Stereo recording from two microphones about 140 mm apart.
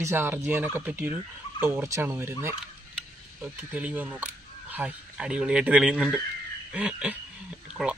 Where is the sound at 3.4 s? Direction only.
10° right (ahead or behind).